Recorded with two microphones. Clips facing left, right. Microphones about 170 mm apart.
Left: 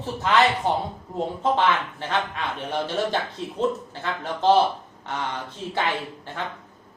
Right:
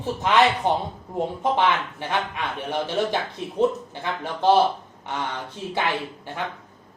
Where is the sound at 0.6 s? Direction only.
20° right (ahead or behind).